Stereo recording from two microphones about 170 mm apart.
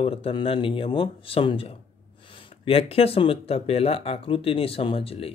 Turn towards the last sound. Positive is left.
turn(degrees=35)  # may be behind; listen again after turning